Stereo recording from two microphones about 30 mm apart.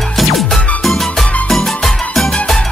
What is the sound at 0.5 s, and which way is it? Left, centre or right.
Music, centre.